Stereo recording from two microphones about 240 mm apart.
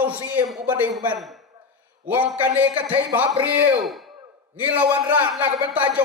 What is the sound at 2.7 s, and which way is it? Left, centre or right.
Speech, right.